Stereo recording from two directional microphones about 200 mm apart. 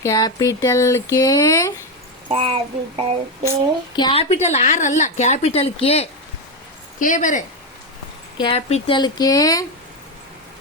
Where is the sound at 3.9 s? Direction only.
25° left (ahead or behind).